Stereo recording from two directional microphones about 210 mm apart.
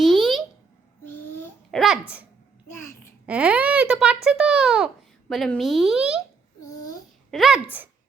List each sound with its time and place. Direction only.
0.0 s a sound: centre (ahead or behind)
1.7 s a sound: centre (ahead or behind)
2.6 s babbling: 10° left (ahead or behind)
3.2 s a child's voice: 5° right (ahead or behind)
6.6 s babbling: 15° left (ahead or behind)
7.3 s a child's voice: centre (ahead or behind)